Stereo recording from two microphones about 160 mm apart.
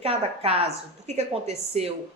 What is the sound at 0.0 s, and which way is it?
Speech, 40° right (ahead or behind).